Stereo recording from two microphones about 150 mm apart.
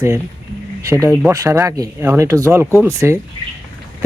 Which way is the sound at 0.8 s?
20° right (ahead or behind).